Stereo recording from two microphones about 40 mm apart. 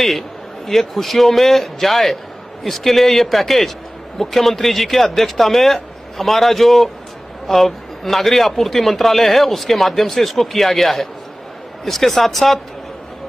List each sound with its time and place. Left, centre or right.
0.7 s a man's voice: centre